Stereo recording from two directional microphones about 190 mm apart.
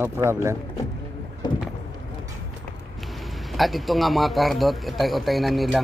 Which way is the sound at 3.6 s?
Centre (ahead or behind).